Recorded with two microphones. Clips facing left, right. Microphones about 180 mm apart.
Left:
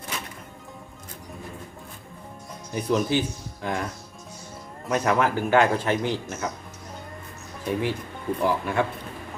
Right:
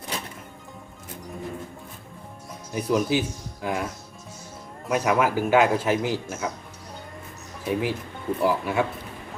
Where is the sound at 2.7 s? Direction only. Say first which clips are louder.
Even; 5° right (ahead or behind).